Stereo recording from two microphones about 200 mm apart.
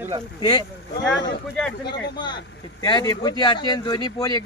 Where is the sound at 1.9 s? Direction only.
20° left (ahead or behind).